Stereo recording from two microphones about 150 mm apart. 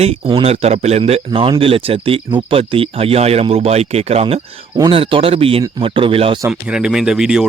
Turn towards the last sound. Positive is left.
turn(degrees=-5)  # may be behind; listen again after turning